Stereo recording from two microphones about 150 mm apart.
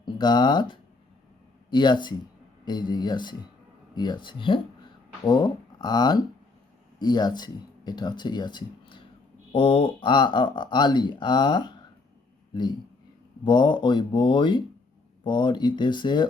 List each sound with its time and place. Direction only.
0.0 s speech: 30° left (ahead or behind)
13.4 s speech: 30° left (ahead or behind)